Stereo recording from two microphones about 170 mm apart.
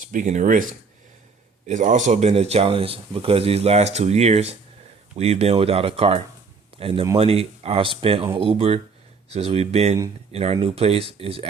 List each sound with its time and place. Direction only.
0.1 s speech: 45° right (ahead or behind)
1.6 s speech: 45° right (ahead or behind)